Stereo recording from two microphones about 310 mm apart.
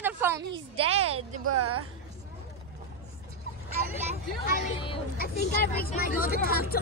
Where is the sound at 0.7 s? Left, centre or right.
Centre.